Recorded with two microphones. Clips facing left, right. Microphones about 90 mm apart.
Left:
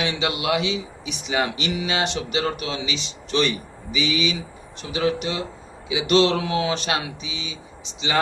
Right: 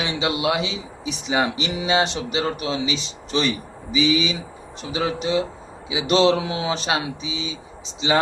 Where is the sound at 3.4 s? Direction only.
30° right (ahead or behind).